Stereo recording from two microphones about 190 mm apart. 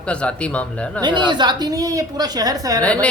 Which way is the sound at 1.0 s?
25° right (ahead or behind).